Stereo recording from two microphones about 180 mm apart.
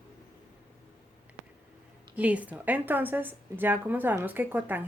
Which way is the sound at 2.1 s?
10° right (ahead or behind).